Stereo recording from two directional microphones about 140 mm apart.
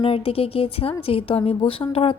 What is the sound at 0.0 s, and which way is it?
A woman's voice, 40° left (ahead or behind).